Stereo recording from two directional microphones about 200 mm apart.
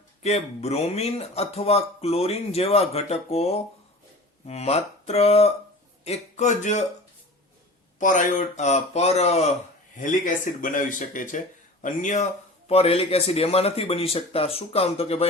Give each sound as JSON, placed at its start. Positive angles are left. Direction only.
{"t": 0.2, "sound": "speech", "side_deg": 30}
{"t": 7.9, "sound": "a man's voice", "side_deg": 40}